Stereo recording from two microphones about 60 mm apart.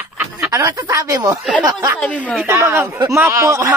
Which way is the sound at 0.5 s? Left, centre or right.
Right.